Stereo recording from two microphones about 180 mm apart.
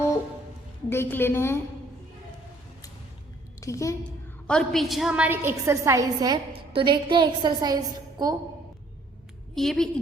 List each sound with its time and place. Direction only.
0.9 s a woman's voice: 10° left (ahead or behind)
3.6 s a woman's voice: 15° left (ahead or behind)
4.4 s a woman's voice: 5° left (ahead or behind); by 7.8 s 25° right (ahead or behind)
9.6 s a woman's voice: centre (ahead or behind)